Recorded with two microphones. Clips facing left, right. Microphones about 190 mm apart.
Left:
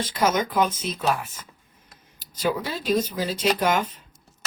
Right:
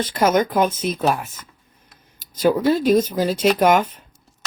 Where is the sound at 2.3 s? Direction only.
45° right (ahead or behind).